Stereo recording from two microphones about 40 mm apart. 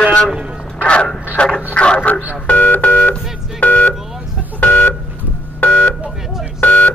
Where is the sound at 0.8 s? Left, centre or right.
Left.